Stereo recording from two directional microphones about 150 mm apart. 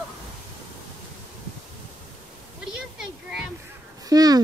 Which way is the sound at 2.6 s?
5° right (ahead or behind).